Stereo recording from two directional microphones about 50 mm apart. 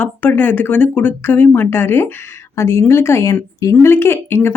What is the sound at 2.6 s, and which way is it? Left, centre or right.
Speech, left.